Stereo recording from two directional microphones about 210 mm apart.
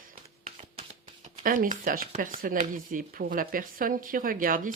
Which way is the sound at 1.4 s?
40° right (ahead or behind).